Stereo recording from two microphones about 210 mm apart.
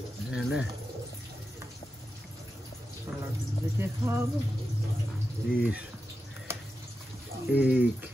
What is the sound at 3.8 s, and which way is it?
Speech, 10° right (ahead or behind).